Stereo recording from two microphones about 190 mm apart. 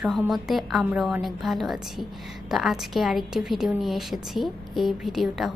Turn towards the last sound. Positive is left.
turn(degrees=0)  # may be behind; listen again after turning